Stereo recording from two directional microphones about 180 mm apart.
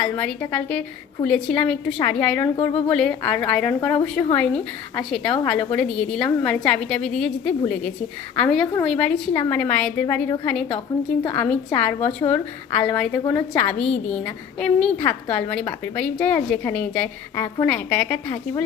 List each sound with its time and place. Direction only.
0.0 s a woman's voice: 5° left (ahead or behind)
2.6 s speech: 30° left (ahead or behind)
2.9 s a woman's voice: 5° left (ahead or behind)
11.9 s a woman's voice: 30° left (ahead or behind)
12.3 s a woman's voice: 10° left (ahead or behind)